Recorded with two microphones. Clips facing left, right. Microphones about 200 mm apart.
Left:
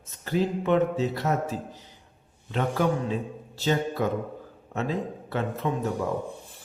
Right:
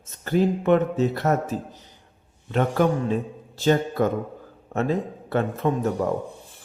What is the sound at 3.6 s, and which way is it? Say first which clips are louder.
A man's voice: right 5 dB; 50° right (ahead or behind).